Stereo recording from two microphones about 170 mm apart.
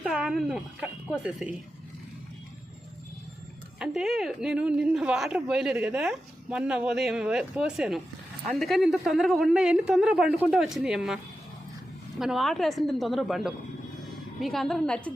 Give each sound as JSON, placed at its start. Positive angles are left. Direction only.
{"t": 0.0, "sound": "speech", "side_deg": -5}
{"t": 3.8, "sound": "a woman's voice", "side_deg": 0}
{"t": 12.2, "sound": "a woman's voice", "side_deg": 0}